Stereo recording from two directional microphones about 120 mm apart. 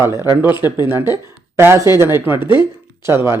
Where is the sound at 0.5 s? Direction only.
35° left (ahead or behind).